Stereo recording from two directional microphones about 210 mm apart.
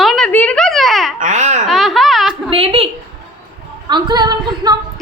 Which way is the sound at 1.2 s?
35° right (ahead or behind).